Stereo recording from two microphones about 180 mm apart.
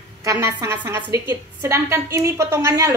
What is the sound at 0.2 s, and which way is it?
A woman's voice, 20° right (ahead or behind).